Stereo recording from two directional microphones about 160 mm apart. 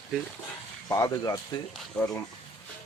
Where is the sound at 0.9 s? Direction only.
20° left (ahead or behind).